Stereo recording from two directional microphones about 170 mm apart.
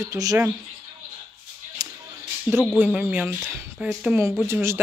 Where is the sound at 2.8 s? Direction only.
10° right (ahead or behind).